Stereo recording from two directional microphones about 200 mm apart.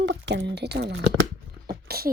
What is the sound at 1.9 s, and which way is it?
Beatboxing, 50° right (ahead or behind).